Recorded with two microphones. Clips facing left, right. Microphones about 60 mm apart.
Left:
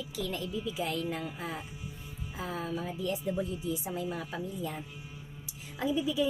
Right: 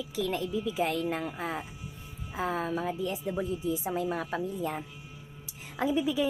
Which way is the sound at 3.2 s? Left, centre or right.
Right.